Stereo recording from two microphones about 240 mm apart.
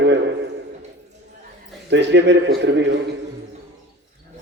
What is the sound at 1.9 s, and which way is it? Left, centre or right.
A man's voice, right.